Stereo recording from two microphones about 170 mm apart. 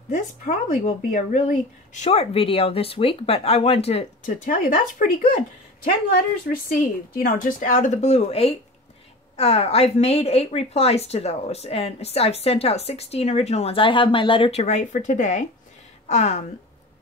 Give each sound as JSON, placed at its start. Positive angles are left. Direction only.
{"t": 0.1, "sound": "a woman's voice", "side_deg": 50}
{"t": 6.5, "sound": "a woman's voice", "side_deg": 55}